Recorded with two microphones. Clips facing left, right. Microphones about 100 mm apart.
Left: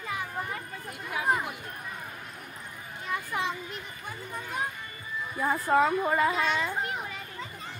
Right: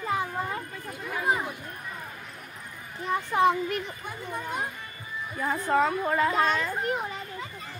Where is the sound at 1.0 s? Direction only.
Centre (ahead or behind).